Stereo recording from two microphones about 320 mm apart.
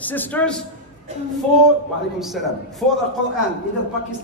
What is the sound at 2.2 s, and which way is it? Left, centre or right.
Speech, centre.